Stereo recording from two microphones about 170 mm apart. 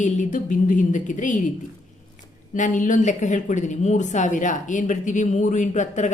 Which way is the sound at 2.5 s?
50° left (ahead or behind).